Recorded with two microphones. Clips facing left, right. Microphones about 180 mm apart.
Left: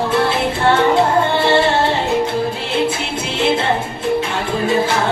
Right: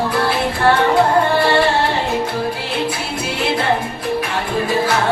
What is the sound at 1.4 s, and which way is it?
Female singing, 25° left (ahead or behind).